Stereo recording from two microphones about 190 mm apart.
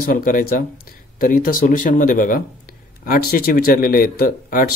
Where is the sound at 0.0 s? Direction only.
45° left (ahead or behind).